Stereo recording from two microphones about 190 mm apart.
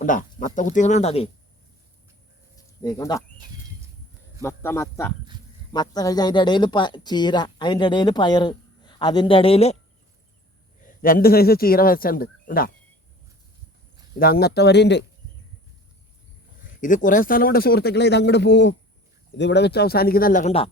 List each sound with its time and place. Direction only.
0.0 s speech: 45° left (ahead or behind)
2.8 s speech: 20° left (ahead or behind)
4.4 s speech: 15° left (ahead or behind); by 9.7 s 30° left (ahead or behind)
10.8 s speech: 50° left (ahead or behind)
14.2 s speech: 55° left (ahead or behind)
16.8 s speech: 45° left (ahead or behind)